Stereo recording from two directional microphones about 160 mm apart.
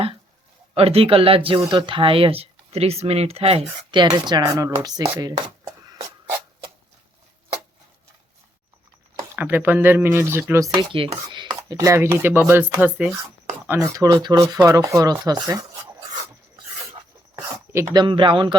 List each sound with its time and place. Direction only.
0.7 s speech: 35° right (ahead or behind)
9.3 s chopping: 10° right (ahead or behind)
10.5 s speech: 20° right (ahead or behind)
10.9 s chopping: 30° right (ahead or behind); by 13.1 s 10° right (ahead or behind)
13.7 s speech: 20° right (ahead or behind)
17.3 s a sound: 15° right (ahead or behind)
17.9 s speech: 30° right (ahead or behind)